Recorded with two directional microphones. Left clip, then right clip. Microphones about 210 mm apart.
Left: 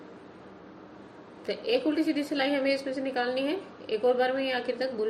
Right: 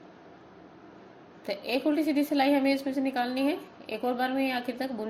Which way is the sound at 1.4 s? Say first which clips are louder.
Left 1 dB; 40° right (ahead or behind).